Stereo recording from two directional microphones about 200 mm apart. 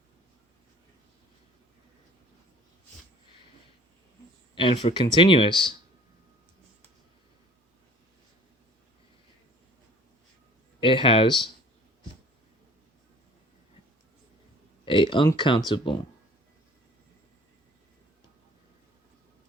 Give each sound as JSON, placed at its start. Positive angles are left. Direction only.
{"t": 4.5, "sound": "speech", "side_deg": 25}
{"t": 10.8, "sound": "speech", "side_deg": 25}
{"t": 14.8, "sound": "speech", "side_deg": 25}